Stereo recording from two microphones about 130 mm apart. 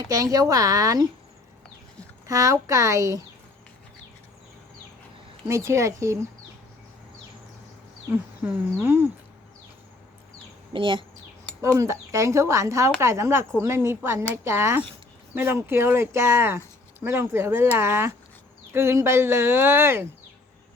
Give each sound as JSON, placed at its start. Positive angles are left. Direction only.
{"t": 0.0, "sound": "speech", "side_deg": -25}
{"t": 2.2, "sound": "speech", "side_deg": -25}
{"t": 5.5, "sound": "speech", "side_deg": -20}
{"t": 8.1, "sound": "a sound", "side_deg": -15}
{"t": 10.7, "sound": "speech", "side_deg": -40}
{"t": 11.8, "sound": "speech", "side_deg": -25}